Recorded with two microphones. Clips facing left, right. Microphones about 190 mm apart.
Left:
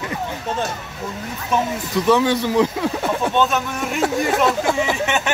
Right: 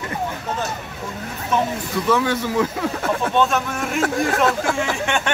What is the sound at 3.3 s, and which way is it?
Speech, centre (ahead or behind).